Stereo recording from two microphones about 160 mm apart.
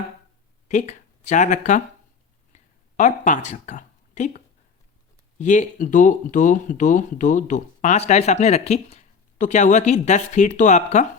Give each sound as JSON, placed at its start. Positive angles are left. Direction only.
{"t": 0.7, "sound": "speech", "side_deg": 50}
{"t": 3.0, "sound": "speech", "side_deg": 50}